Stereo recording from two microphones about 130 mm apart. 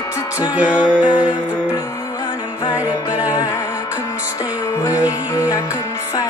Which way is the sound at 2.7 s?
10° right (ahead or behind).